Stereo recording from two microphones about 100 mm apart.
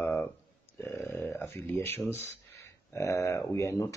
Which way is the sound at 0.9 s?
25° left (ahead or behind).